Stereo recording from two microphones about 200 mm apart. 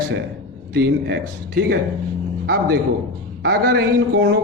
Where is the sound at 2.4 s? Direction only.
50° right (ahead or behind).